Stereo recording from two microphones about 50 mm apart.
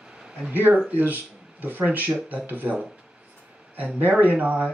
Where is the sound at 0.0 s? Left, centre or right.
Centre.